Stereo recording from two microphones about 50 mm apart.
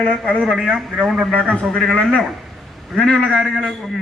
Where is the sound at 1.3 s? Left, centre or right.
Left.